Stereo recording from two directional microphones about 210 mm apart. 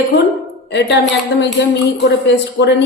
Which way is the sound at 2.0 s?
55° left (ahead or behind).